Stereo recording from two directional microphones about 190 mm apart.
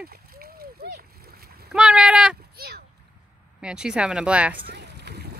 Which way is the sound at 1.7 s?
5° right (ahead or behind).